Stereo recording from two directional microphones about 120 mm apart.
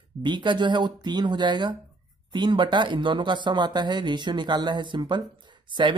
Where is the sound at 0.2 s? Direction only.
40° right (ahead or behind).